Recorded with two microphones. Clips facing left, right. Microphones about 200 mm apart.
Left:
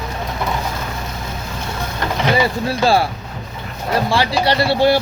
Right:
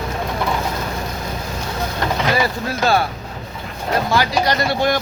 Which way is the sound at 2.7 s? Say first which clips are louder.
Left 2 dB; 30° left (ahead or behind).